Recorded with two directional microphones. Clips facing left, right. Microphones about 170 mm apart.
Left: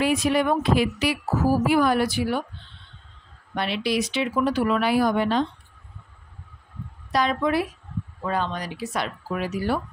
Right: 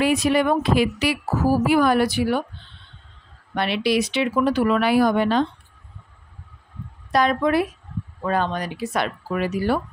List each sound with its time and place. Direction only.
0.0 s speech: 75° right (ahead or behind)
3.5 s speech: 70° right (ahead or behind)
7.1 s speech: 55° right (ahead or behind)